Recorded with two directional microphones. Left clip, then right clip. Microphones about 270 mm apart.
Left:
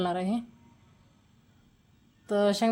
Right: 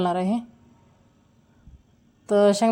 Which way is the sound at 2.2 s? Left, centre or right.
Centre.